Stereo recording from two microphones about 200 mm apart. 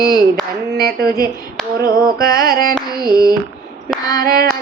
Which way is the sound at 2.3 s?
50° right (ahead or behind).